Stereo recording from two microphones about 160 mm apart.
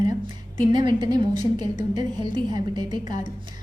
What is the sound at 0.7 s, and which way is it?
A woman's voice, 25° right (ahead or behind).